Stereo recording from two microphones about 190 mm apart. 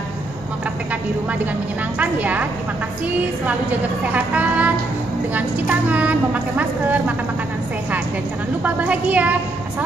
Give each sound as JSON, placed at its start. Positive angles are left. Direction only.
{"t": 2.0, "sound": "a woman's voice", "side_deg": -10}
{"t": 4.0, "sound": "a woman's voice", "side_deg": -5}
{"t": 8.6, "sound": "a woman's voice", "side_deg": -5}